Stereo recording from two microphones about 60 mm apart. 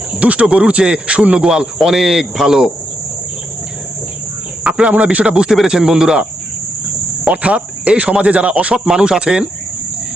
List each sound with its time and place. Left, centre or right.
0.2 s speech: right
4.6 s speech: right
7.3 s speech: centre